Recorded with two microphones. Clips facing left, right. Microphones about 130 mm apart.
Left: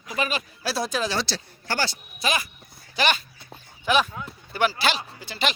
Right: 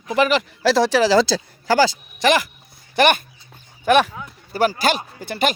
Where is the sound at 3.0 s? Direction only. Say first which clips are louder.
Right 8 dB; 55° right (ahead or behind).